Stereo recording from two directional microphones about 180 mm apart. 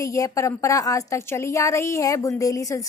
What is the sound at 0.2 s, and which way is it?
A woman's voice, 15° left (ahead or behind).